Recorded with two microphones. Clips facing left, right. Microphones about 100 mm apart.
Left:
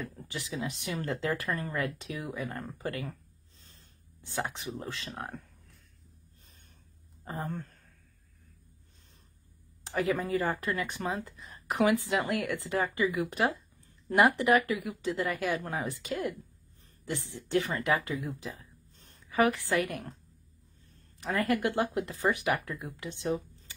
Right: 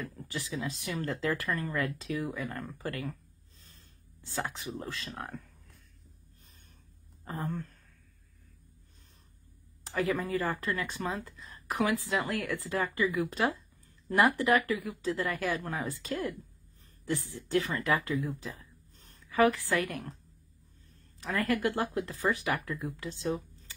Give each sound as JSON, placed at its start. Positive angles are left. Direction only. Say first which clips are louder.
{"t": 0.0, "sound": "speech", "louder": "right 1 dB", "side_deg": 25}
{"t": 7.4, "sound": "speech", "louder": "right 2 dB", "side_deg": 35}
{"t": 9.8, "sound": "a woman's voice", "louder": "left 1 dB", "side_deg": 25}
{"t": 21.2, "sound": "speech", "louder": "left 1 dB", "side_deg": 25}